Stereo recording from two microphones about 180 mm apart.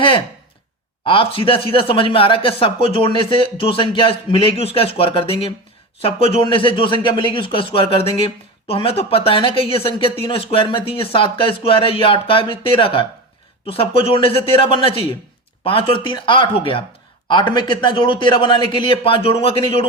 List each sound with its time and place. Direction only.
1.0 s speech: 30° left (ahead or behind)